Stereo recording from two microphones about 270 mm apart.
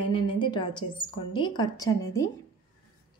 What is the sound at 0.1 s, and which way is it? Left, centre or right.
A woman's voice, centre.